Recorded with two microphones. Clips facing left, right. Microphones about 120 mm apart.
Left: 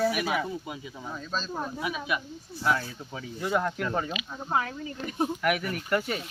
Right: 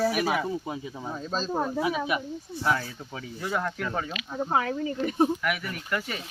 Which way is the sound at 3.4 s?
10° left (ahead or behind).